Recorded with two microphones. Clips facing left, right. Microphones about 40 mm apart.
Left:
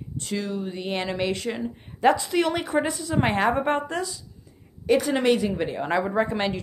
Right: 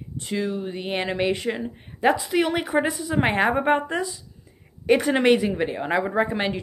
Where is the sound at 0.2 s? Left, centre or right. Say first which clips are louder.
Right 2 dB; centre.